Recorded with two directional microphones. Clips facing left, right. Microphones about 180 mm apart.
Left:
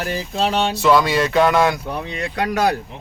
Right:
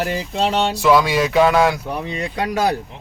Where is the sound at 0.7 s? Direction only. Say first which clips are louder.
Even; 10° right (ahead or behind).